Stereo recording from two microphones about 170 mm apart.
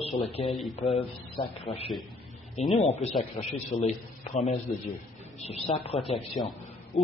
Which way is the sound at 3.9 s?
40° left (ahead or behind).